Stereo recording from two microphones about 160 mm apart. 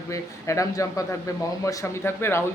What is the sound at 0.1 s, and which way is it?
Speech, 20° left (ahead or behind).